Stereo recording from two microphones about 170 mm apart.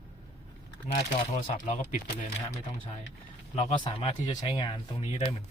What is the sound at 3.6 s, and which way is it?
Speech, 35° left (ahead or behind).